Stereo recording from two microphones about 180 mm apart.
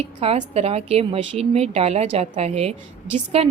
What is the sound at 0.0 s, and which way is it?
A woman's voice, 35° right (ahead or behind).